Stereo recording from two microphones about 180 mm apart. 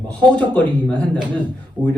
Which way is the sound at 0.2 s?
10° left (ahead or behind).